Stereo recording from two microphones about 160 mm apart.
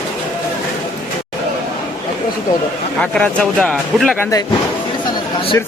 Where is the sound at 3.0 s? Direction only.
5° left (ahead or behind).